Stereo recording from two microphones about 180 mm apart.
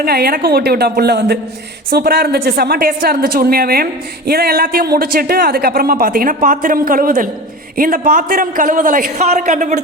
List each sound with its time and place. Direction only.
0.0 s a woman's voice: 55° right (ahead or behind); by 9.8 s 40° right (ahead or behind)